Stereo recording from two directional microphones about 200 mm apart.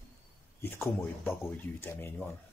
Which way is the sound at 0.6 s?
10° left (ahead or behind).